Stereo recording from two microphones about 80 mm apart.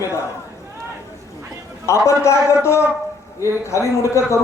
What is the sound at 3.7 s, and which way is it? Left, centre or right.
Speech, left.